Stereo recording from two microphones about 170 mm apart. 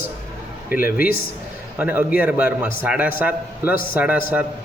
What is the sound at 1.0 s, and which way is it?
Speech, 60° left (ahead or behind).